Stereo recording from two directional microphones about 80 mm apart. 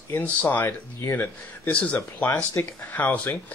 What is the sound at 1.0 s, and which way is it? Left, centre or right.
Speech, left.